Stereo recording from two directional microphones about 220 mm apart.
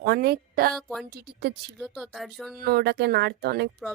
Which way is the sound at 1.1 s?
45° right (ahead or behind).